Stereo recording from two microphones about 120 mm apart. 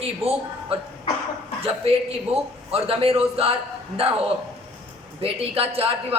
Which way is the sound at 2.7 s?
55° right (ahead or behind).